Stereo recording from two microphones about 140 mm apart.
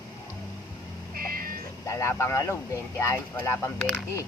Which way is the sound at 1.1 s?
90° right.